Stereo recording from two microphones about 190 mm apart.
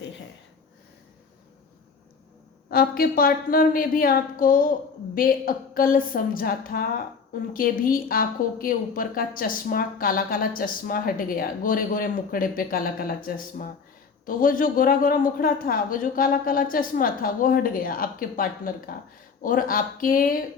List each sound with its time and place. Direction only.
2.6 s a woman's voice: 50° left (ahead or behind)